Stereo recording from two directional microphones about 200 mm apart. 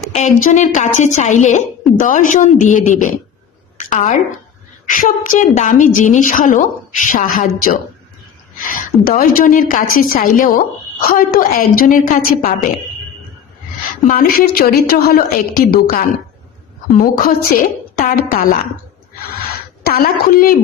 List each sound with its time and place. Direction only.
0.4 s a woman's voice: 40° left (ahead or behind)
14.1 s a woman's voice: 45° left (ahead or behind)
17.0 s a woman's voice: 45° left (ahead or behind)
19.8 s a woman's voice: 50° left (ahead or behind)